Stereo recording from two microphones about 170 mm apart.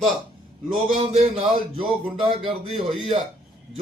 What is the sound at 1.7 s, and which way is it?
Speech, 30° right (ahead or behind).